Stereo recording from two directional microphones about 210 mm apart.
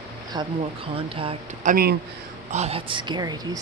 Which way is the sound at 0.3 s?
25° right (ahead or behind).